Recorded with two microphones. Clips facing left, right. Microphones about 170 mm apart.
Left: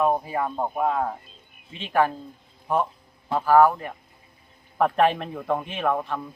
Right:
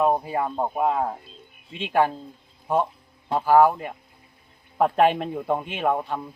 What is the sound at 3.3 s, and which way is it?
Speech, 20° right (ahead or behind).